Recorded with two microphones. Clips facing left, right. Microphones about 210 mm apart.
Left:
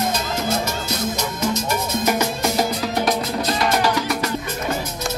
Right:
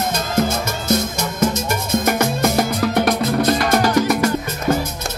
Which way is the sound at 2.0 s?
55° right (ahead or behind).